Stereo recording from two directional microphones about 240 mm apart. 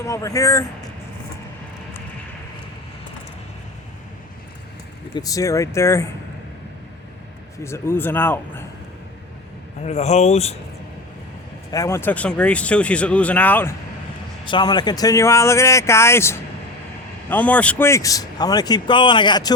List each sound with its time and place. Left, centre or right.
0.0 s a man's voice: centre
5.1 s a man's voice: centre
7.6 s a man's voice: centre
9.8 s speech: left
11.7 s speech: centre
14.4 s a man's voice: centre